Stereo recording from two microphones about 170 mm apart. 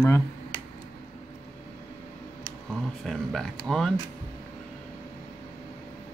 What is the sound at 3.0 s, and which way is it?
Speech, centre (ahead or behind).